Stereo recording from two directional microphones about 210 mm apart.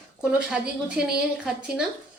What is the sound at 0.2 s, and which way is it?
A woman's voice, 5° right (ahead or behind).